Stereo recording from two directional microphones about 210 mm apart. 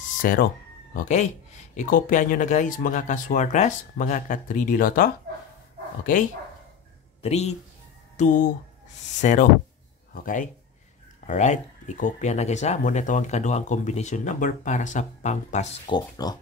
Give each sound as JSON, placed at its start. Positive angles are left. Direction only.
{"t": 0.2, "sound": "speech", "side_deg": 40}
{"t": 7.2, "sound": "speech", "side_deg": 30}
{"t": 15.9, "sound": "speech", "side_deg": 20}